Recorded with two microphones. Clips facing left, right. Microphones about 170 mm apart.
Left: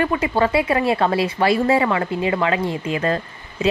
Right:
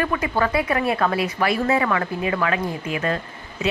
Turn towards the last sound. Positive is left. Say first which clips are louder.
# left 3 dB
turn(degrees=30)  # may be behind; listen again after turning